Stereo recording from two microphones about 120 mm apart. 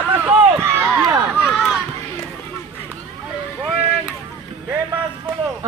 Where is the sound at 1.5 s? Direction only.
Centre (ahead or behind).